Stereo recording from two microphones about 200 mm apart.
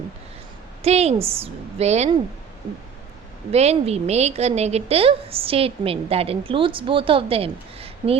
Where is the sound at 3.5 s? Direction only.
30° right (ahead or behind).